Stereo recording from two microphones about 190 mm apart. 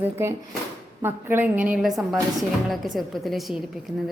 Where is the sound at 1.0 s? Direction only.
10° right (ahead or behind).